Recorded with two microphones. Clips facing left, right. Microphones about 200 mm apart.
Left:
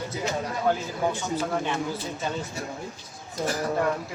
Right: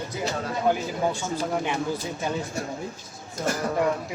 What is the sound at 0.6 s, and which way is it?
Speech, 15° right (ahead or behind).